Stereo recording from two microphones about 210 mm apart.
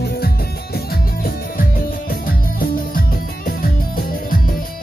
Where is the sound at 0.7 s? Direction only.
45° left (ahead or behind).